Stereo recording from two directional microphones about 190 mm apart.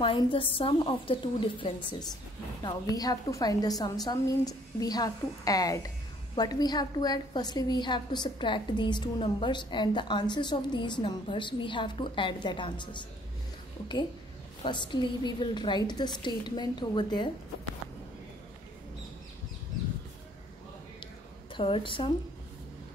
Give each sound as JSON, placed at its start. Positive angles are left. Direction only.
{"t": 0.0, "sound": "a woman's voice", "side_deg": 25}
{"t": 14.6, "sound": "a woman's voice", "side_deg": 25}
{"t": 21.5, "sound": "a woman's voice", "side_deg": 25}